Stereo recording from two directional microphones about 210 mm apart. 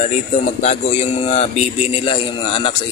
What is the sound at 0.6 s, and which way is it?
A man's voice, 30° left (ahead or behind).